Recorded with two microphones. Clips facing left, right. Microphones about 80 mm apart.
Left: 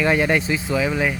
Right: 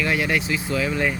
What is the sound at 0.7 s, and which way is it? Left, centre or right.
Speech, centre.